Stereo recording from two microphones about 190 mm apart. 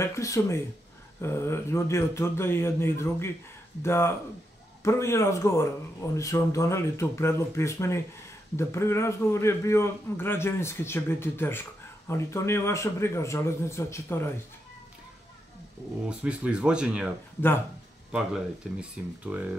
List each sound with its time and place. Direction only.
0.0 s a man's voice: 15° left (ahead or behind)
16.1 s speech: 5° right (ahead or behind)
18.1 s speech: 5° right (ahead or behind)